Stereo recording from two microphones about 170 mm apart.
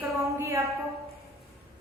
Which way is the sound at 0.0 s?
15° right (ahead or behind).